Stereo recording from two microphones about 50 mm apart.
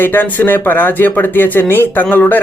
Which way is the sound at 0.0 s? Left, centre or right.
Left.